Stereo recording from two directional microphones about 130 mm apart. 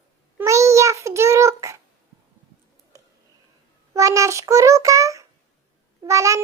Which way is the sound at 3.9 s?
25° right (ahead or behind).